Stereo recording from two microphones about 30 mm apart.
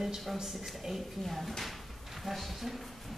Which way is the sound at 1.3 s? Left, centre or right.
Centre.